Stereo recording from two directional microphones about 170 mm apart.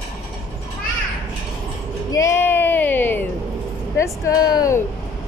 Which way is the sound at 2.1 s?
15° left (ahead or behind).